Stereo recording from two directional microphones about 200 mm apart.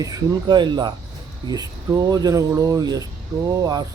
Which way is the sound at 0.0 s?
20° right (ahead or behind).